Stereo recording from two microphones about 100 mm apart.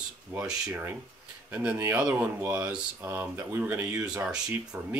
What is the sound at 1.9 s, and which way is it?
Speech, 20° right (ahead or behind).